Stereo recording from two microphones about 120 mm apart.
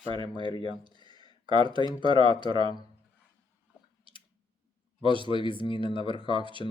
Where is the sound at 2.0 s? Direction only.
45° right (ahead or behind).